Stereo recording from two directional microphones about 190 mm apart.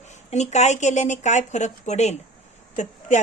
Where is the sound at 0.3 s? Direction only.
35° left (ahead or behind).